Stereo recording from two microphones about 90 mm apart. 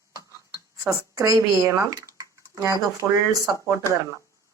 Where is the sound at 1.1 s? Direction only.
35° right (ahead or behind).